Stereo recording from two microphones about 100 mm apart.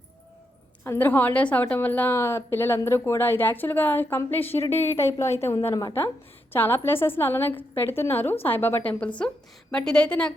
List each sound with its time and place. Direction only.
0.9 s a woman's voice: 20° left (ahead or behind)